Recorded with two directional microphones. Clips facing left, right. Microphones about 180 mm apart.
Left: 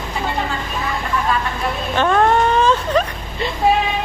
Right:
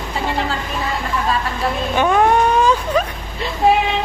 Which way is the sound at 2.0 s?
10° right (ahead or behind).